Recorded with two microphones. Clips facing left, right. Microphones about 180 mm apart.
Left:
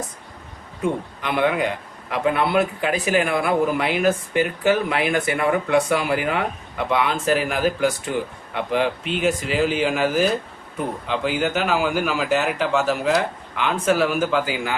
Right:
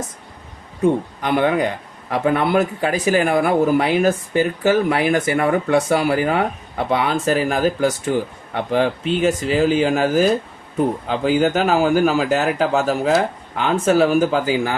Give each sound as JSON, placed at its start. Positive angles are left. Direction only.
{"t": 1.2, "sound": "speech", "side_deg": -40}